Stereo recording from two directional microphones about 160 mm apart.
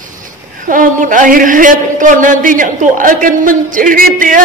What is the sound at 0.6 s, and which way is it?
A woman's voice, 55° right (ahead or behind).